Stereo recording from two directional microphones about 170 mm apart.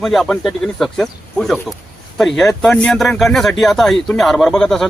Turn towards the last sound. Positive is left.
turn(degrees=5)  # may be behind; listen again after turning